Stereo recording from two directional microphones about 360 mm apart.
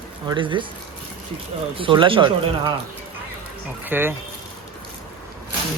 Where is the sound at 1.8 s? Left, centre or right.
Centre.